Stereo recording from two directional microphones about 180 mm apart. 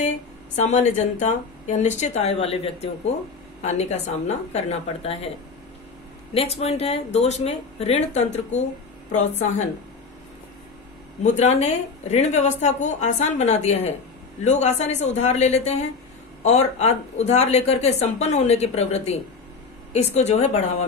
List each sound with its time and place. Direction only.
0.6 s speech: 40° left (ahead or behind)
6.3 s speech: 35° left (ahead or behind)
11.3 s speech: 40° left (ahead or behind)